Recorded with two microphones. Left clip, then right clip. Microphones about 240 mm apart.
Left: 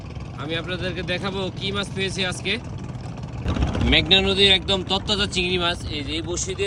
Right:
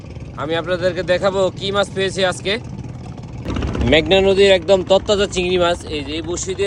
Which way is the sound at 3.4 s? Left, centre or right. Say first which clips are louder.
Right 4 dB; right.